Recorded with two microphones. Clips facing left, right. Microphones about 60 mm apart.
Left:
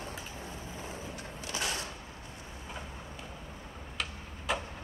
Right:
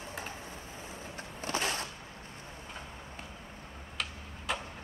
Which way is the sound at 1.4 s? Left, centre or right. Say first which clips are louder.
Right 3 dB; right.